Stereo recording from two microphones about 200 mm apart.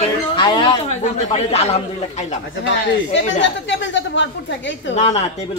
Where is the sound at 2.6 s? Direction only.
65° left (ahead or behind).